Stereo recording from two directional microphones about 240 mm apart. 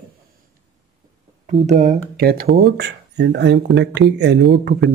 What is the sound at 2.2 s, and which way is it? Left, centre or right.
Speech, right.